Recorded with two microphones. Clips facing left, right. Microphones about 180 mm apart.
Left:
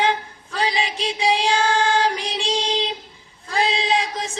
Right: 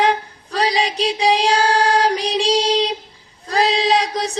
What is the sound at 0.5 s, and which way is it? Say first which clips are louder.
Child singing: right 5 dB; 40° right (ahead or behind).